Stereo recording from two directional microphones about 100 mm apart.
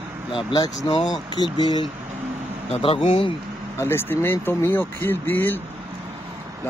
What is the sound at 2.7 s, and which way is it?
Speech, 70° left (ahead or behind).